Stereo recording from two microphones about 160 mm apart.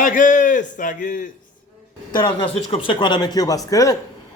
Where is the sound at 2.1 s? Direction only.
30° left (ahead or behind).